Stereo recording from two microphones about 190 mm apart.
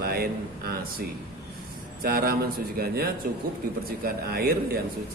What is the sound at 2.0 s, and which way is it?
A man's voice, 50° right (ahead or behind).